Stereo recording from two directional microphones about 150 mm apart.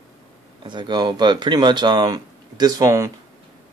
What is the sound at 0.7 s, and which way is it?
Speech, 30° right (ahead or behind).